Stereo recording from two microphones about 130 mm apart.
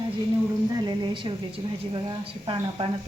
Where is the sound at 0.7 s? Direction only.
35° right (ahead or behind).